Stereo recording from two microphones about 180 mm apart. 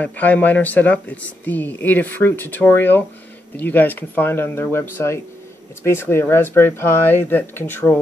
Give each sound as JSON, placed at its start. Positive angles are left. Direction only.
{"t": 0.0, "sound": "speech", "side_deg": 10}